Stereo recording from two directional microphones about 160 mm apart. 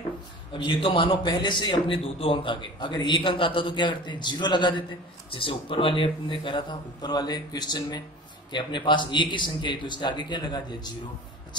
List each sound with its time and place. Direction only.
0.5 s a man's voice: 30° left (ahead or behind)